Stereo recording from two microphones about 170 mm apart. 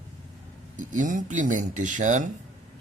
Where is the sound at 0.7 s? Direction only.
50° right (ahead or behind).